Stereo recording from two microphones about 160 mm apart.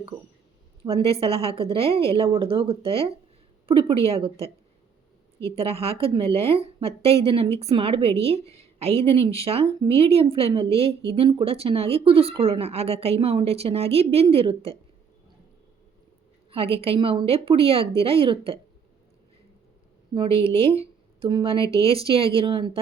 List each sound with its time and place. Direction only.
0.9 s a woman's voice: 35° right (ahead or behind)
5.5 s a woman's voice: 35° right (ahead or behind)
16.5 s a woman's voice: 35° right (ahead or behind)
20.4 s a woman's voice: 35° right (ahead or behind)